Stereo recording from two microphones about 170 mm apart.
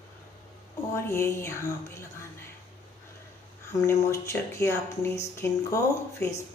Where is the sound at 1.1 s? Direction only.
15° left (ahead or behind).